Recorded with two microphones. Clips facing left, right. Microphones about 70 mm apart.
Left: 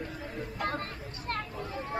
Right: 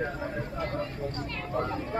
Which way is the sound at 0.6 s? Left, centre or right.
Left.